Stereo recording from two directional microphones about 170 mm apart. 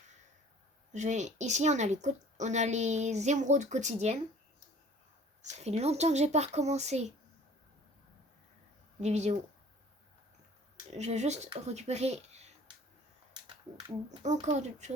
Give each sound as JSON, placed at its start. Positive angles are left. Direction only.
{"t": 0.9, "sound": "speech", "side_deg": -45}
{"t": 5.4, "sound": "speech", "side_deg": -40}
{"t": 9.0, "sound": "speech", "side_deg": -40}
{"t": 10.9, "sound": "speech", "side_deg": -40}
{"t": 14.2, "sound": "speech", "side_deg": -40}